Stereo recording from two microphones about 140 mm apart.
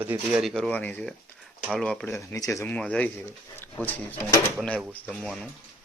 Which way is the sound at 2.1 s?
20° left (ahead or behind).